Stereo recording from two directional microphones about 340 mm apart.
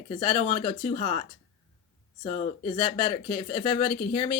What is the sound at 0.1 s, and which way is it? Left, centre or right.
Speech, centre.